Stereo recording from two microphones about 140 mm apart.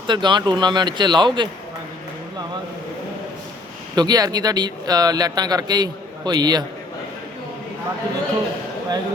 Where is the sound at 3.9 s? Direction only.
30° right (ahead or behind).